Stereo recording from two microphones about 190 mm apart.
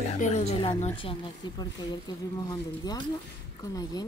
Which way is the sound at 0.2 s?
35° left (ahead or behind).